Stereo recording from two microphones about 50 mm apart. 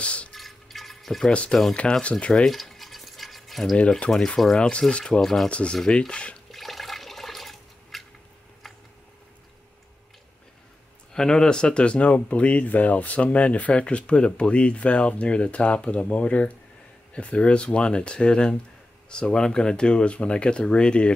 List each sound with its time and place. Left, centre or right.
0.0 s drip: left
0.3 s a sound: centre
1.7 s speech: left
2.4 s drip: centre
4.1 s speech: centre
5.2 s speech: centre
5.5 s speech: left
6.5 s toilet flush: centre
11.1 s speech: centre